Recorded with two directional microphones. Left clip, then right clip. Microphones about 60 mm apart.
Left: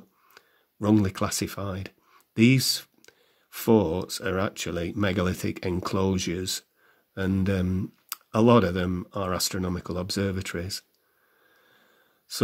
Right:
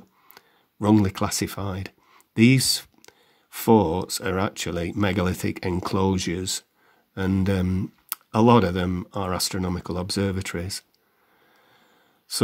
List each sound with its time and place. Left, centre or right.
0.3 s speech: right